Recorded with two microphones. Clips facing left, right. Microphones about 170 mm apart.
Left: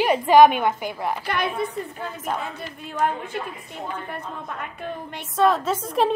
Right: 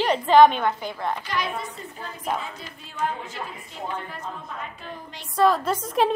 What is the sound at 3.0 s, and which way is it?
A woman's voice, 55° left (ahead or behind).